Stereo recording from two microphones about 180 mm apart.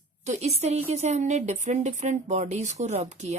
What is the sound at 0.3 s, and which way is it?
A woman's voice, 35° right (ahead or behind).